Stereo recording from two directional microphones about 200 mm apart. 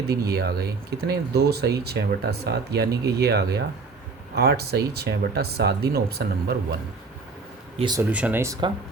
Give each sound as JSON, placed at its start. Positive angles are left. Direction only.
{"t": 0.1, "sound": "speech", "side_deg": -50}
{"t": 7.8, "sound": "speech", "side_deg": -20}
{"t": 8.1, "sound": "speech", "side_deg": -10}